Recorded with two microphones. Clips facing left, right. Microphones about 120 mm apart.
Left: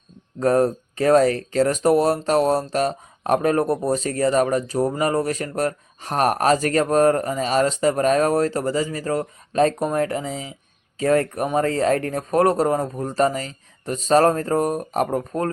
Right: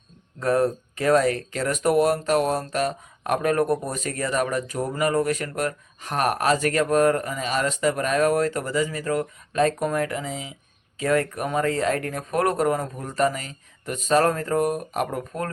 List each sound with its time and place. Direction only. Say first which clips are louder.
0.3 s speech: left 3 dB; 35° left (ahead or behind)